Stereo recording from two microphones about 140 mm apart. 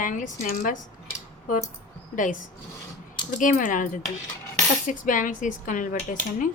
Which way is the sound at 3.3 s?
70° left (ahead or behind).